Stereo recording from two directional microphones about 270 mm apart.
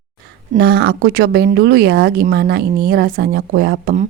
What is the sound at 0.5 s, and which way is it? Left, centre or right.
Speech, right.